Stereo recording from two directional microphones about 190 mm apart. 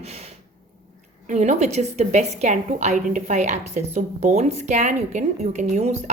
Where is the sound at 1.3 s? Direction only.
40° right (ahead or behind).